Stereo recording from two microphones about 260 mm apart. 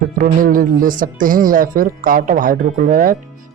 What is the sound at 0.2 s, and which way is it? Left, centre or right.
Speech, right.